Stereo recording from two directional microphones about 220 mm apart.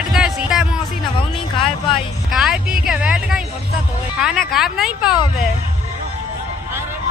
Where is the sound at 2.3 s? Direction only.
Centre (ahead or behind).